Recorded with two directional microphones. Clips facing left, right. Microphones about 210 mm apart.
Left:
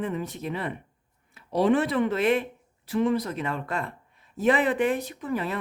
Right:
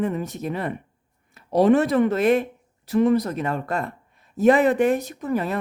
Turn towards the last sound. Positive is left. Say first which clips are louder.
# right 5 dB
turn(degrees=-45)  # may be behind; listen again after turning